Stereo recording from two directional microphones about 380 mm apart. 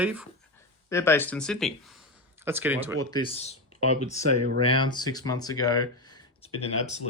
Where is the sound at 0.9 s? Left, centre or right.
Centre.